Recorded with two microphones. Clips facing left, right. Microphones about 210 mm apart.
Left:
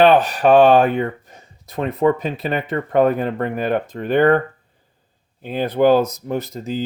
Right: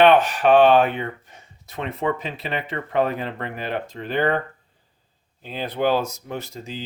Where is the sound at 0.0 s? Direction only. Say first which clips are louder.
Left 2 dB; 35° left (ahead or behind); by 4.4 s 50° left (ahead or behind).